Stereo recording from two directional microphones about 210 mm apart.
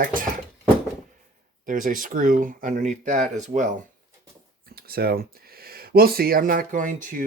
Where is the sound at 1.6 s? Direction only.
40° right (ahead or behind).